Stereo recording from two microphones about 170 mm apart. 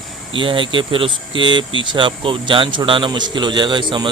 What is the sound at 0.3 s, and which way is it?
A man's voice, 30° right (ahead or behind).